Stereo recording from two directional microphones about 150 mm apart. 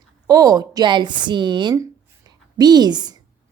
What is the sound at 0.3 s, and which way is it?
A woman's voice, 25° right (ahead or behind).